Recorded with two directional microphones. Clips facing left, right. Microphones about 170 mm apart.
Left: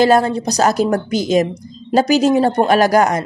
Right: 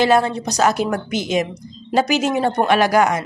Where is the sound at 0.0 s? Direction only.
40° left (ahead or behind).